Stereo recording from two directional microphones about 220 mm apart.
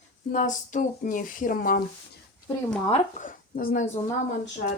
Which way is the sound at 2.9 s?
35° left (ahead or behind).